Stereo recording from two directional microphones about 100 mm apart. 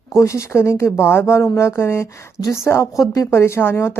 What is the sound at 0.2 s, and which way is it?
Speech, 30° left (ahead or behind).